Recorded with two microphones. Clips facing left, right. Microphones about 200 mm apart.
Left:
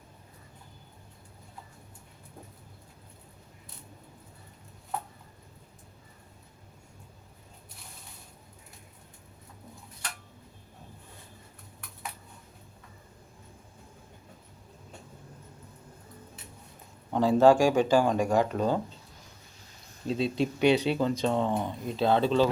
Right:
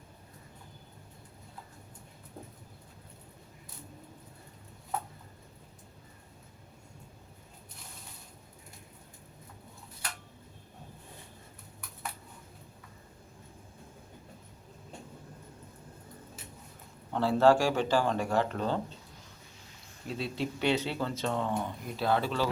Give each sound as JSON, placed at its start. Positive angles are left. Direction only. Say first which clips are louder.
{"t": 17.1, "sound": "speech", "louder": "left 3 dB", "side_deg": 15}
{"t": 20.1, "sound": "speech", "louder": "left 7 dB", "side_deg": 20}